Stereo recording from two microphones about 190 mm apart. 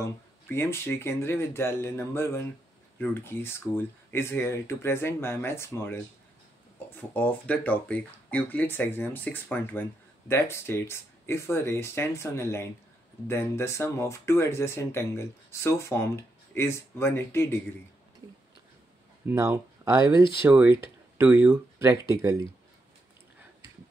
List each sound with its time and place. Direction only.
0.0 s speech: 15° left (ahead or behind)
19.2 s speech: 15° right (ahead or behind)